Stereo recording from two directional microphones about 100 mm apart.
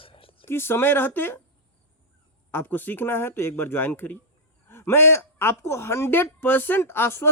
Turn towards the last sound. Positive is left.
turn(degrees=25)  # may be behind; listen again after turning